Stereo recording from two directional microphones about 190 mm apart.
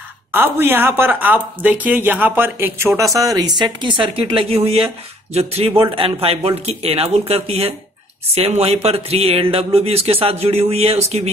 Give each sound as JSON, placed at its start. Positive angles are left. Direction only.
{"t": 0.3, "sound": "speech", "side_deg": -10}